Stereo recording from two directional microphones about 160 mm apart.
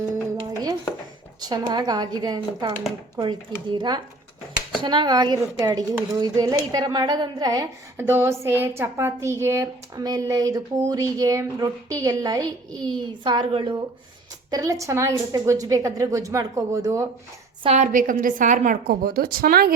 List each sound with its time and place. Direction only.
1.4 s a woman's voice: 25° right (ahead or behind)
14.5 s a woman's voice: 20° right (ahead or behind)
17.6 s a woman's voice: 40° right (ahead or behind)
17.8 s a woman's voice: 55° right (ahead or behind)